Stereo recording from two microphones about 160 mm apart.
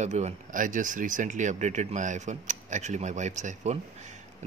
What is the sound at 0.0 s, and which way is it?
Speech, 45° right (ahead or behind).